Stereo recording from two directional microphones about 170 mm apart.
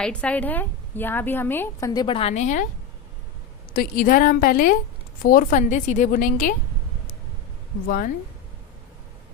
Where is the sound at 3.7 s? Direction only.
60° left (ahead or behind).